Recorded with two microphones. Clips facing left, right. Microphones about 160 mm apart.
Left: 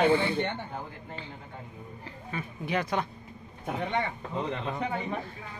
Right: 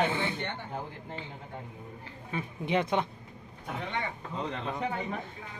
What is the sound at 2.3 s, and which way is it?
Speech, 20° right (ahead or behind).